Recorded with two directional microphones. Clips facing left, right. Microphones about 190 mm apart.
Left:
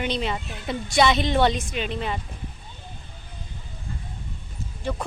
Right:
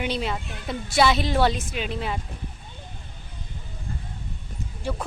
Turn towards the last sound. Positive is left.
turn(degrees=-5)  # may be behind; listen again after turning